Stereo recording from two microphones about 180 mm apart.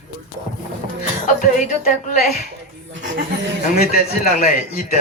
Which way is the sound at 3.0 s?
90° right.